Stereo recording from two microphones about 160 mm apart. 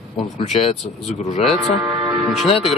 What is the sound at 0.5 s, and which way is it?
Speech, 40° left (ahead or behind).